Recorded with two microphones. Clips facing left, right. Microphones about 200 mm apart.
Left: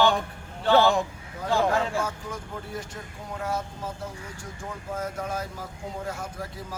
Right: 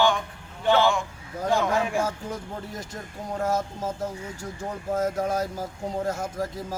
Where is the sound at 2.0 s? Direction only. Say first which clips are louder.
Right 3 dB; 40° right (ahead or behind).